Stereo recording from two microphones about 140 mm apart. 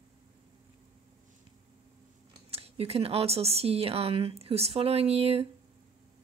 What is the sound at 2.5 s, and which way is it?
Speech, 45° right (ahead or behind).